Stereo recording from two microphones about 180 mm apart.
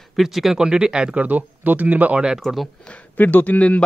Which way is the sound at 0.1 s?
Centre (ahead or behind).